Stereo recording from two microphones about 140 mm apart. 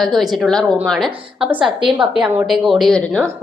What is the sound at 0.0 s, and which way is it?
A woman's voice, centre (ahead or behind).